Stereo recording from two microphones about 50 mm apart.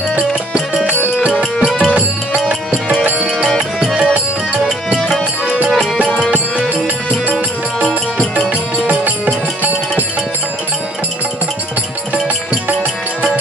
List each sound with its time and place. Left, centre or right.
2.0 s music: right
4.9 s music: centre
8.8 s music: right